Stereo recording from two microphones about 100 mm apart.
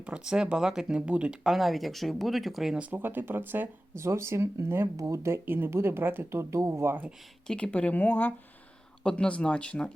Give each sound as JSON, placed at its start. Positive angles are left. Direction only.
{"t": 0.0, "sound": "speech", "side_deg": -10}
{"t": 1.5, "sound": "speech", "side_deg": 0}
{"t": 2.8, "sound": "speech", "side_deg": -20}
{"t": 7.4, "sound": "speech", "side_deg": 10}